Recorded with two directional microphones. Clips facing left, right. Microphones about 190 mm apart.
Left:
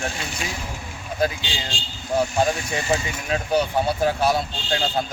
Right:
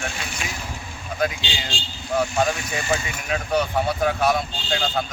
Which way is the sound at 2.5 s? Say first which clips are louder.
Left 1 dB; 30° left (ahead or behind).